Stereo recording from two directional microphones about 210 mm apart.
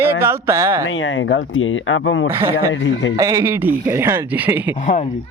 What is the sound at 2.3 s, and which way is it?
Speech, 10° right (ahead or behind).